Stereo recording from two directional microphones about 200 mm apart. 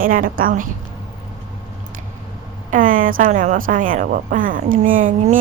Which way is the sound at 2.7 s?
40° right (ahead or behind).